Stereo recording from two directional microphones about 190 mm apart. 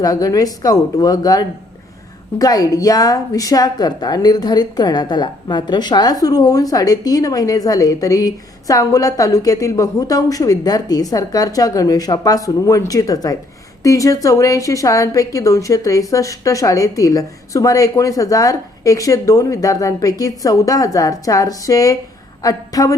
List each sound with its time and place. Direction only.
0.0 s a woman's voice: 20° left (ahead or behind)